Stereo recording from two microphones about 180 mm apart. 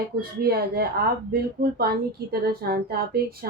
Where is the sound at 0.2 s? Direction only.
60° right (ahead or behind).